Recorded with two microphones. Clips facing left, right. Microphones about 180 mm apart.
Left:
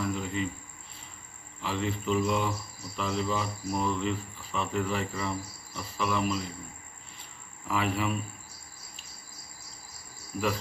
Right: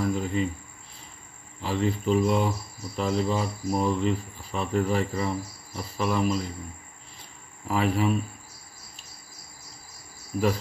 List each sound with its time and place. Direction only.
0.0 s cricket: 40° right (ahead or behind)
1.6 s speech: 40° right (ahead or behind)
7.6 s speech: 40° right (ahead or behind)